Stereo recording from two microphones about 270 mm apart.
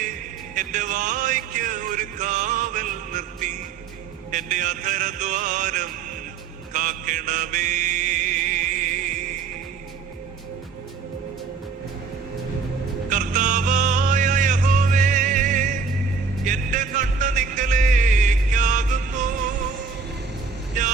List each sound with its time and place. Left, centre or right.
0.0 s music: right
13.1 s music: right